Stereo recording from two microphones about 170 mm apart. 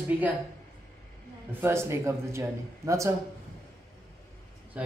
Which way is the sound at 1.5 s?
15° right (ahead or behind).